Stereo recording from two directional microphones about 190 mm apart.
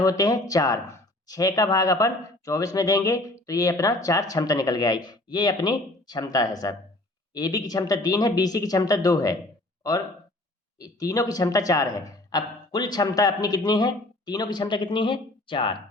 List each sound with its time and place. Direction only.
0.0 s speech: 20° left (ahead or behind)
10.8 s speech: 20° left (ahead or behind)